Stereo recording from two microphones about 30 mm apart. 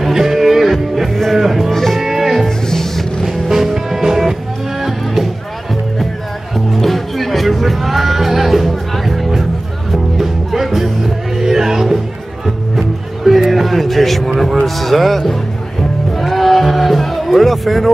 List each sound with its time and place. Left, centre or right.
0.0 s music: centre
1.7 s music: centre
2.0 s music: centre
2.6 s music: centre
3.3 s music: centre
6.5 s music: centre
14.8 s speech: centre
16.1 s music: centre